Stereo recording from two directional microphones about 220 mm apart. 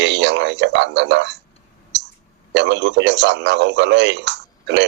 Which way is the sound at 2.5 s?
55° right (ahead or behind).